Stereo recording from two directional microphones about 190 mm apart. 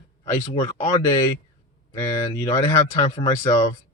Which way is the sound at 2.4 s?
20° left (ahead or behind).